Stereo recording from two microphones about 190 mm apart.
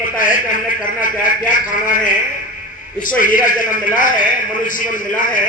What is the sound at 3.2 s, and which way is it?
A man's voice, 45° left (ahead or behind).